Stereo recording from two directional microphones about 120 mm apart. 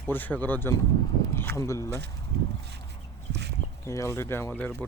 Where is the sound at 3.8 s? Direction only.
25° left (ahead or behind).